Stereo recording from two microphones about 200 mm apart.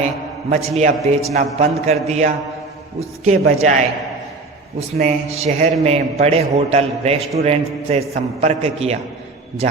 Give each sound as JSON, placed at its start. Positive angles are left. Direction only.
{"t": 0.5, "sound": "a man's voice", "side_deg": -35}
{"t": 4.9, "sound": "a man's voice", "side_deg": -35}